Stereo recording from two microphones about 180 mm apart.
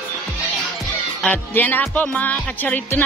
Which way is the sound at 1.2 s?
10° left (ahead or behind).